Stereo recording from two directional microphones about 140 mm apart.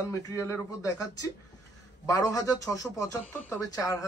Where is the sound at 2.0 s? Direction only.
25° left (ahead or behind).